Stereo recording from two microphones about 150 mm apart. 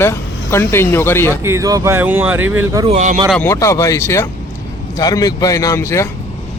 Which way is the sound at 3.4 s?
20° left (ahead or behind).